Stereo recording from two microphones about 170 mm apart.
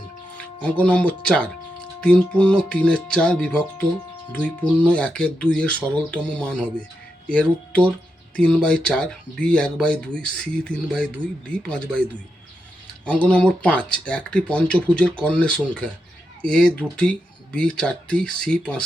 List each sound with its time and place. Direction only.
0.3 s speech: 10° left (ahead or behind)
13.1 s speech: 5° left (ahead or behind)